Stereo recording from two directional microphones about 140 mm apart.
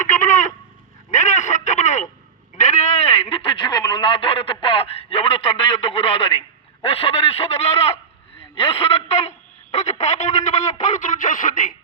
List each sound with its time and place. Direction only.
0.1 s chicken: 65° left (ahead or behind)
1.1 s a sound: 60° left (ahead or behind)
2.6 s speech: 55° left (ahead or behind)